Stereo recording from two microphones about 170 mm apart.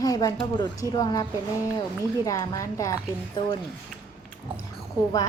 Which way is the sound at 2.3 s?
20° left (ahead or behind).